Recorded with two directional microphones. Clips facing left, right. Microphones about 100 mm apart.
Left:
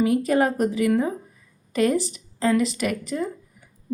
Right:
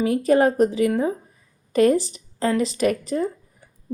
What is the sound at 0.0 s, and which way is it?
A woman's voice, 30° right (ahead or behind).